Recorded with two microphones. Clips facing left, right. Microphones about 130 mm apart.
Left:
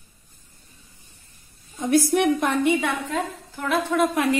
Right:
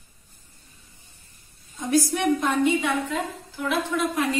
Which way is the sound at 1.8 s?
55° left (ahead or behind).